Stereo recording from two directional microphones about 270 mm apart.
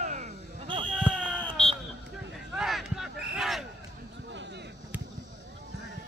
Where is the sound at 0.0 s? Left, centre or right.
Right.